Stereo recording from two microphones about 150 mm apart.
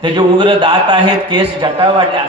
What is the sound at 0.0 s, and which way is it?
A man's voice, 30° right (ahead or behind).